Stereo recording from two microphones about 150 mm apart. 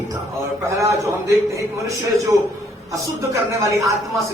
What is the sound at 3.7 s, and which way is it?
Speech, 20° right (ahead or behind).